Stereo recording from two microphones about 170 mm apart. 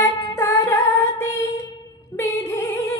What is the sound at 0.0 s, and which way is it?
Music, 15° left (ahead or behind).